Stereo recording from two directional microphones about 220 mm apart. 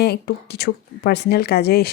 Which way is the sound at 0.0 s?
45° left (ahead or behind).